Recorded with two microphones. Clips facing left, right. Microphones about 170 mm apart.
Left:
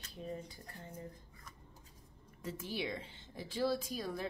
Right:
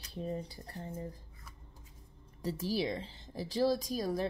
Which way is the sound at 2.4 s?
35° right (ahead or behind).